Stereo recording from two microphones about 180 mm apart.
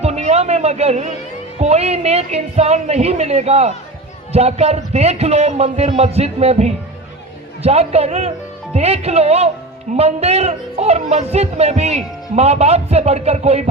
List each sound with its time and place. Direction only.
0.0 s a man's voice: 40° right (ahead or behind)